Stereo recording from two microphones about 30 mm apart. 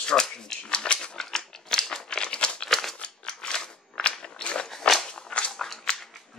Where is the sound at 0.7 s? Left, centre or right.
Left.